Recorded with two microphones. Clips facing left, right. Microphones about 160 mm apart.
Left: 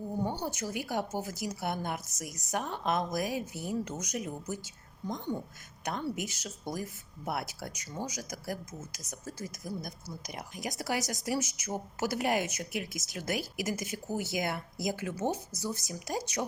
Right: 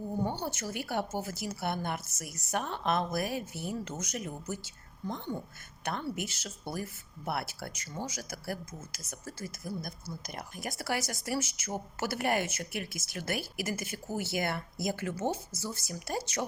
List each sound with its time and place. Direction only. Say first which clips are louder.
0.3 s a woman's voice: even; 15° left (ahead or behind)